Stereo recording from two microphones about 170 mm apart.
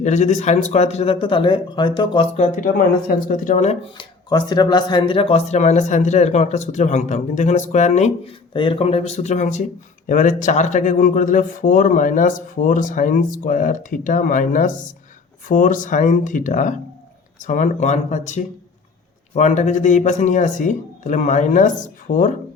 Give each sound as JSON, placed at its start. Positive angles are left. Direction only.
{"t": 0.0, "sound": "speech", "side_deg": 45}
{"t": 2.3, "sound": "speech", "side_deg": 45}
{"t": 3.9, "sound": "speech", "side_deg": 25}